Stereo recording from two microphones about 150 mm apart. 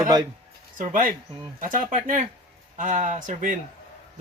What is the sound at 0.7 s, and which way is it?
Speech, 65° right (ahead or behind).